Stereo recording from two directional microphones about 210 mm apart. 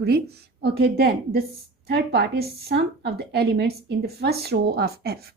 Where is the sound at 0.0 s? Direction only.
50° right (ahead or behind).